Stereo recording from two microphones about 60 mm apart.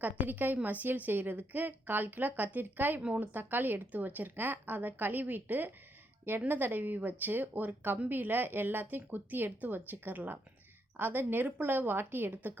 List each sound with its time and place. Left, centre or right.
0.0 s speech: right